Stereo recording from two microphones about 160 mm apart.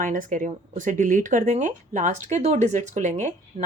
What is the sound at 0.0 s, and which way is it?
Speech, 55° right (ahead or behind).